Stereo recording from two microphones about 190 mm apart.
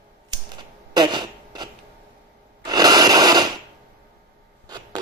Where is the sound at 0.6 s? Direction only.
25° right (ahead or behind).